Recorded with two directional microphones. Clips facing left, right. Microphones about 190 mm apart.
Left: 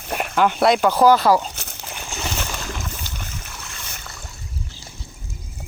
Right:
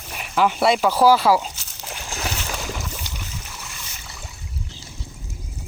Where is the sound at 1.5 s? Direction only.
60° left (ahead or behind).